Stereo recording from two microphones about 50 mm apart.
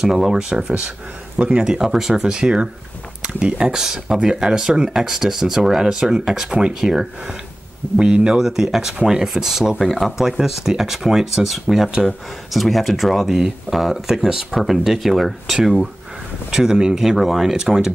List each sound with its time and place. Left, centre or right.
0.0 s speech: centre
9.8 s speech: centre